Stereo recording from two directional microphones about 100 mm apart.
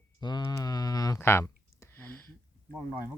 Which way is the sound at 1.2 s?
25° left (ahead or behind).